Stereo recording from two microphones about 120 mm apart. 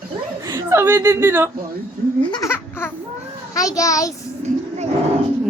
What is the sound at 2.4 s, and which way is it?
Baby laughter, 20° left (ahead or behind).